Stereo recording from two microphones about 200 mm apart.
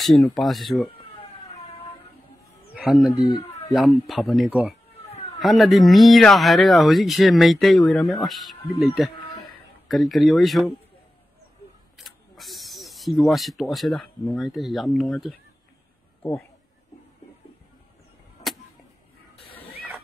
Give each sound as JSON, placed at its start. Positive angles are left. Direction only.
{"t": 0.3, "sound": "speech", "side_deg": 0}
{"t": 2.7, "sound": "a sound", "side_deg": 0}
{"t": 3.2, "sound": "speech", "side_deg": 25}
{"t": 4.1, "sound": "speech", "side_deg": 0}
{"t": 5.1, "sound": "cat", "side_deg": 30}
{"t": 5.4, "sound": "speech", "side_deg": 0}
{"t": 12.0, "sound": "speech", "side_deg": 0}
{"t": 18.4, "sound": "a sound", "side_deg": 0}